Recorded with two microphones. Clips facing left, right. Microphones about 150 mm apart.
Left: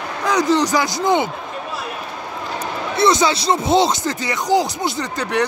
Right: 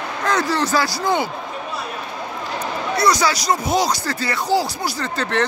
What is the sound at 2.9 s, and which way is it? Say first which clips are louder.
Speech: left 2 dB; 25° left (ahead or behind).